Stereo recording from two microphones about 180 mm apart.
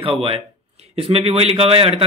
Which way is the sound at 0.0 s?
30° right (ahead or behind).